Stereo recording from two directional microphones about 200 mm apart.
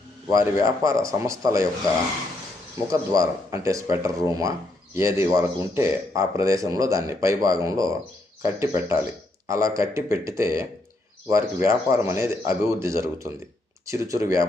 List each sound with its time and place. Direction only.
0.3 s speech: 15° right (ahead or behind)
2.8 s speech: 15° right (ahead or behind)